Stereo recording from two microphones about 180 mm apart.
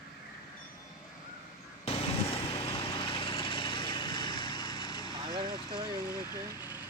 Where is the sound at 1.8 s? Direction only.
35° left (ahead or behind).